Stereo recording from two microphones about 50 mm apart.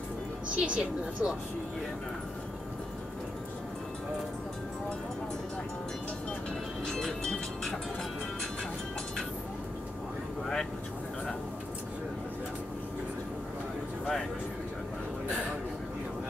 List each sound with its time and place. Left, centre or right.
0.6 s a woman's voice: right
6.9 s music: centre
10.4 s speech: centre